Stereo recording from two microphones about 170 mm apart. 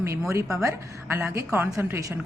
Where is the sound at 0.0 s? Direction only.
15° right (ahead or behind).